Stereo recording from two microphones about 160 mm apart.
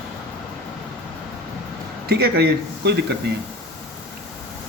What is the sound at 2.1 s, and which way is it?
Speech, 90° right.